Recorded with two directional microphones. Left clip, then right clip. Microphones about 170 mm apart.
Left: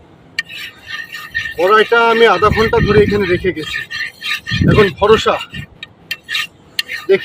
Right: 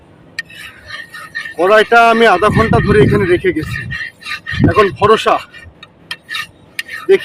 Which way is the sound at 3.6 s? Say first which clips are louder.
Left 1 dB; 5° right (ahead or behind).